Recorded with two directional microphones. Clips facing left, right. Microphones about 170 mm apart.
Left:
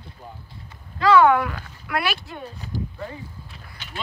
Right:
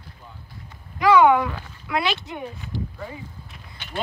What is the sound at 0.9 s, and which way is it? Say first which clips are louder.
Speech: even; 15° right (ahead or behind).